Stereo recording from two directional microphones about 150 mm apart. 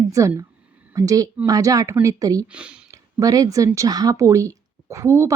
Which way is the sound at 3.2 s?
25° right (ahead or behind).